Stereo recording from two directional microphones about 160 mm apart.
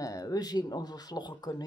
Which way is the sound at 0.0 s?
20° left (ahead or behind).